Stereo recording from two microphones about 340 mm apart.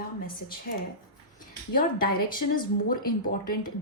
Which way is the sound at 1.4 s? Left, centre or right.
Left.